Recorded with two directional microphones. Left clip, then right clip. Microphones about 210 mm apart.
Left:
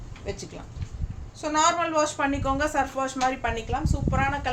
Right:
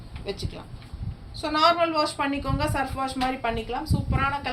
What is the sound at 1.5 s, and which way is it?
A woman's voice, 20° left (ahead or behind).